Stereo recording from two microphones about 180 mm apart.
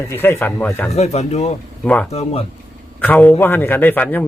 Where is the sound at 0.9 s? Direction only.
35° left (ahead or behind).